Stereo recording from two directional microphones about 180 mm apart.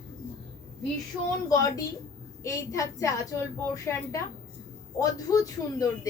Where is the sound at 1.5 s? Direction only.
20° left (ahead or behind).